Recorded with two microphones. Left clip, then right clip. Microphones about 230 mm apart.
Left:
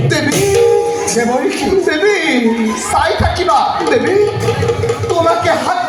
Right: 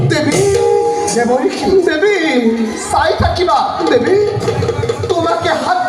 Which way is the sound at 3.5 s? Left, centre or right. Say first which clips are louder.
Left 2 dB; right.